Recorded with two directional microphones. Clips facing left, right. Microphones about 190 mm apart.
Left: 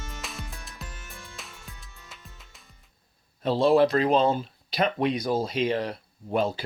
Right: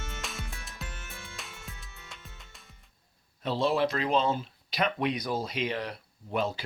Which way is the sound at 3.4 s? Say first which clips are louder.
Left 7 dB; 35° left (ahead or behind).